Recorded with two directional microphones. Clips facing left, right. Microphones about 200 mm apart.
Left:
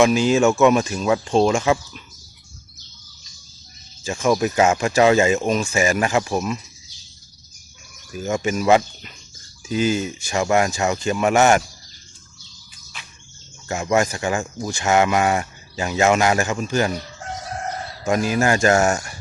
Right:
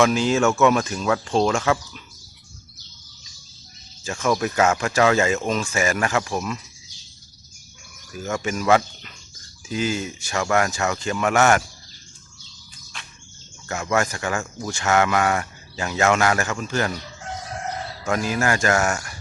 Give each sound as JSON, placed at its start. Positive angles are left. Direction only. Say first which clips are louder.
{"t": 0.0, "sound": "speech", "louder": "left 3 dB", "side_deg": 15}
{"t": 4.0, "sound": "speech", "louder": "left 3 dB", "side_deg": 15}
{"t": 8.2, "sound": "speech", "louder": "left 4 dB", "side_deg": 20}
{"t": 12.9, "sound": "bird", "louder": "even", "side_deg": 5}
{"t": 13.7, "sound": "speech", "louder": "left 3 dB", "side_deg": 20}
{"t": 18.0, "sound": "speech", "louder": "left 4 dB", "side_deg": 15}